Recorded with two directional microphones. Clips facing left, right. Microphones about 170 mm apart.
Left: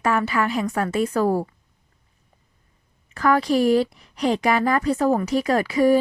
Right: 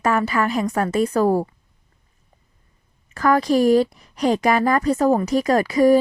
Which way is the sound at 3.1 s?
45° right (ahead or behind).